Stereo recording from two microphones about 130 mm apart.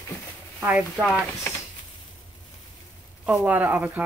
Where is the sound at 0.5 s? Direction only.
10° right (ahead or behind).